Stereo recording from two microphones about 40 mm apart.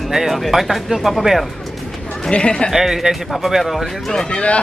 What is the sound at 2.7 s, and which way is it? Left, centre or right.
Speech, centre.